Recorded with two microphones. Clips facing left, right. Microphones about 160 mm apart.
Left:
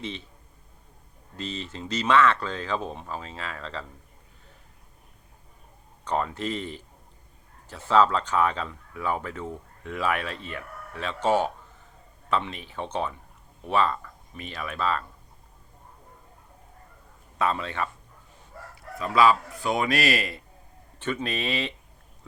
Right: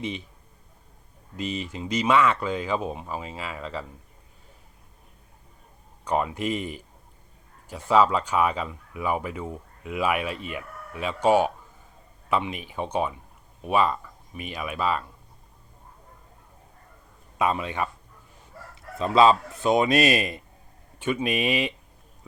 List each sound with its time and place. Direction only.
1.4 s speech: 10° right (ahead or behind)
6.1 s speech: 10° right (ahead or behind)
17.3 s speech: 15° right (ahead or behind)
18.7 s speech: 25° right (ahead or behind)